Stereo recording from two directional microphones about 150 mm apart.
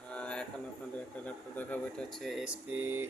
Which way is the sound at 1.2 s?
10° left (ahead or behind).